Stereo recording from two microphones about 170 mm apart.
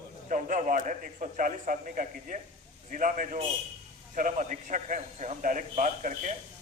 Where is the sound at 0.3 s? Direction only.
50° right (ahead or behind).